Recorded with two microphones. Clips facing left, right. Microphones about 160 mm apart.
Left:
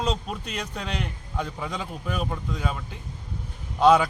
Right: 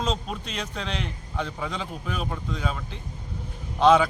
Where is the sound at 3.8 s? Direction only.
10° left (ahead or behind).